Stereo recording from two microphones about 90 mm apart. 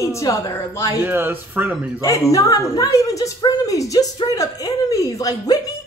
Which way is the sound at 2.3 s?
40° left (ahead or behind).